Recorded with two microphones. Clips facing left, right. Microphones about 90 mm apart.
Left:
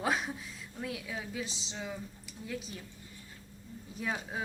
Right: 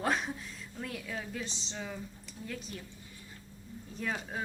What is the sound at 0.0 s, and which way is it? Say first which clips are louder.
A woman's voice: even; 5° left (ahead or behind).